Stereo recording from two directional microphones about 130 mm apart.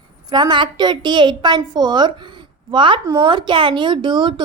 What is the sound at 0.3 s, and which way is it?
A woman's voice, 35° right (ahead or behind).